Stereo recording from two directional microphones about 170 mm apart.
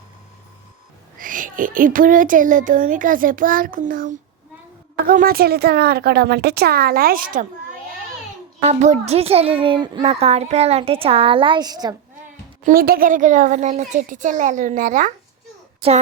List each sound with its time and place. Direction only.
1.2 s frog: 50° right (ahead or behind)
5.0 s speech: 60° right (ahead or behind)
8.6 s a child's voice: 45° right (ahead or behind); by 11.9 s 25° right (ahead or behind)
12.6 s frog: 60° right (ahead or behind)